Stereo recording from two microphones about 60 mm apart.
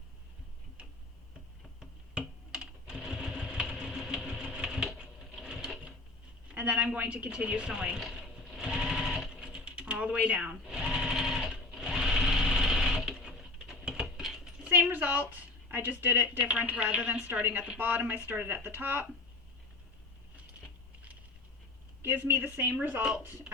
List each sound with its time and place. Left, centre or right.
1.8 s sewing machine: centre
6.5 s a woman's voice: centre
8.1 s sewing machine: centre
9.3 s mechanisms: centre
10.7 s sewing machine: centre
13.9 s a sound: centre
14.7 s a sound: right
16.4 s speech: right
17.4 s a woman's voice: right
22.0 s a woman's voice: right